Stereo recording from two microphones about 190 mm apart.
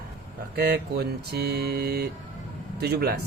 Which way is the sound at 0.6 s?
60° right (ahead or behind).